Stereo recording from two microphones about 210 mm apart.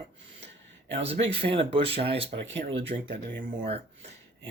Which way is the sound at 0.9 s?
25° right (ahead or behind).